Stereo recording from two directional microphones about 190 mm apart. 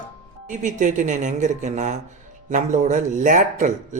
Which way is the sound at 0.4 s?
45° right (ahead or behind).